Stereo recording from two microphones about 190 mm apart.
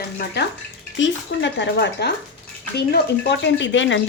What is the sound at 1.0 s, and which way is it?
Speech, 70° left (ahead or behind).